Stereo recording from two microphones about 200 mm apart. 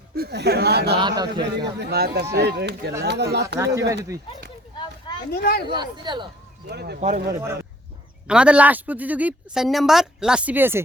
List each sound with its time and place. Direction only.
0.2 s speech: 55° right (ahead or behind)
0.9 s a man's voice: 20° right (ahead or behind)
1.8 s speech: 55° right (ahead or behind)
3.6 s a woman's voice: 15° right (ahead or behind)
5.3 s speech: 50° left (ahead or behind)
5.7 s a man's voice: 20° right (ahead or behind)
6.7 s speech: 55° right (ahead or behind)
7.3 s a woman's voice: 15° right (ahead or behind)